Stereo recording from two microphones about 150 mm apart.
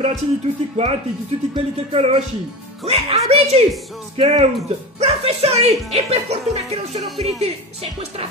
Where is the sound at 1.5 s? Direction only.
40° right (ahead or behind).